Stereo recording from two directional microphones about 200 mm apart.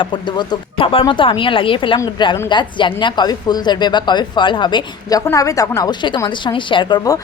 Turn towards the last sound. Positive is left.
turn(degrees=15)  # may be behind; listen again after turning